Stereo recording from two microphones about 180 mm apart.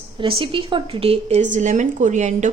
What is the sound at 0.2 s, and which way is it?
A woman's voice, 30° right (ahead or behind).